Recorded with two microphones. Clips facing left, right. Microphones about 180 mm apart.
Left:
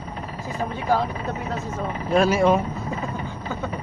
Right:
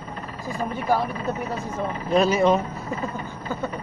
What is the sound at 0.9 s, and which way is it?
Speech, 10° right (ahead or behind).